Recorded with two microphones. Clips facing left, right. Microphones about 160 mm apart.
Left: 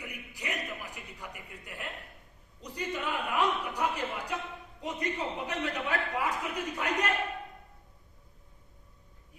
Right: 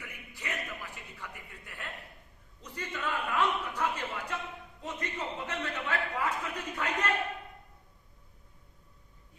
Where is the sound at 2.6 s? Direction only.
15° left (ahead or behind).